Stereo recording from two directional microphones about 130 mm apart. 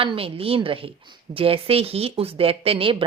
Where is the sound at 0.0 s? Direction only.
45° right (ahead or behind).